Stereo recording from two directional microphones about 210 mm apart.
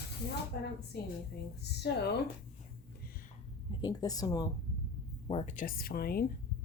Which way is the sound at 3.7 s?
20° left (ahead or behind).